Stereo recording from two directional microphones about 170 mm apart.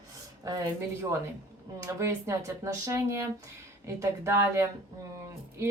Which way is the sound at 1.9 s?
15° right (ahead or behind).